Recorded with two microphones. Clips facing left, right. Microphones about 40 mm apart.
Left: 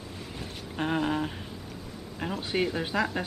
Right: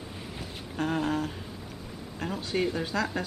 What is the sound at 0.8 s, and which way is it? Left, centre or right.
Speech, centre.